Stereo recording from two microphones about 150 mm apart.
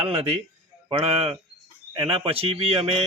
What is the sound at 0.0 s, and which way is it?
Speech, 40° right (ahead or behind).